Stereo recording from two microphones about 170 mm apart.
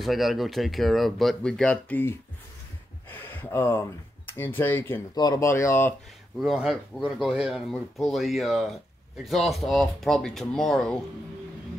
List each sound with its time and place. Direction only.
0.0 s speech: centre (ahead or behind)
3.1 s a sound: 10° left (ahead or behind)
4.4 s speech: 10° left (ahead or behind)
5.1 s speech: 20° left (ahead or behind)
6.4 s speech: centre (ahead or behind)